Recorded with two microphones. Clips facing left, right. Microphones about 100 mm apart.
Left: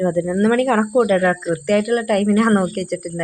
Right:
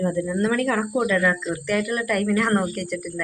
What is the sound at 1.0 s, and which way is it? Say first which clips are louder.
Speech: left 6 dB; 55° left (ahead or behind).